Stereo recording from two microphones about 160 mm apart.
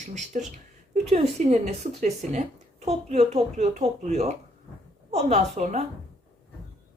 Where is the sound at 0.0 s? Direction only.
50° right (ahead or behind).